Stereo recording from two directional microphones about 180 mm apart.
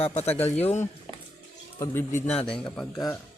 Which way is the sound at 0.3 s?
10° left (ahead or behind).